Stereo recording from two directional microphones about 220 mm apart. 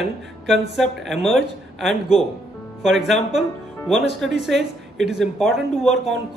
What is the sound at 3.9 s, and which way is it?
Speech, 55° right (ahead or behind).